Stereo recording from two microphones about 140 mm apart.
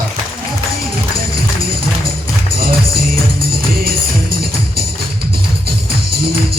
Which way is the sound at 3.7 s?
90° right.